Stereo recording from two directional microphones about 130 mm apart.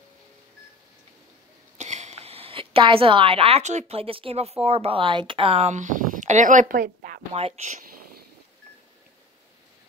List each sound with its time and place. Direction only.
1.8 s a woman's voice: 60° right (ahead or behind); by 7.2 s 90° right
7.3 s speech: 50° right (ahead or behind)